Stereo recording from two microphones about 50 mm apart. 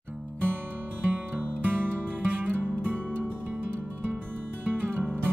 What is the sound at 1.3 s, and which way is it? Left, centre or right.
Music, right.